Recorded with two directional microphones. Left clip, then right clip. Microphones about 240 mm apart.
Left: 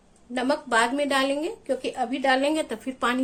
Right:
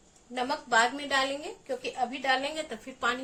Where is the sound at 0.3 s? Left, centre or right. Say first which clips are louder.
Left 3 dB; left.